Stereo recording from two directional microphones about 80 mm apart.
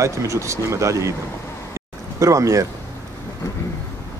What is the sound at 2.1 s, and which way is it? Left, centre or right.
Speech, right.